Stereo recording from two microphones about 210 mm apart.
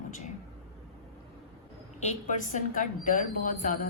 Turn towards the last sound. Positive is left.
turn(degrees=40)  # may be behind; listen again after turning